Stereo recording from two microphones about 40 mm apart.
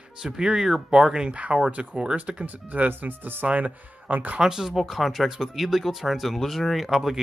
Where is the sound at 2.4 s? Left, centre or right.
Right.